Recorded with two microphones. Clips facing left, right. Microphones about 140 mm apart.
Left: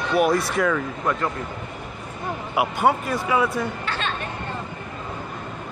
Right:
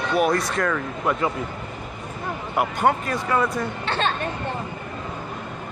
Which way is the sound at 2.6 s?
5° left (ahead or behind).